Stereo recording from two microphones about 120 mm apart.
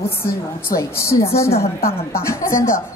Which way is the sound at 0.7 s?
25° left (ahead or behind).